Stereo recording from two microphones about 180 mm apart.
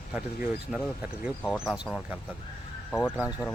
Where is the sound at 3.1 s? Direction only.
5° right (ahead or behind).